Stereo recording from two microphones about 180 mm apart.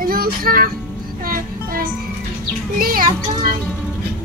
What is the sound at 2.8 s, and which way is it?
Speech, 55° right (ahead or behind).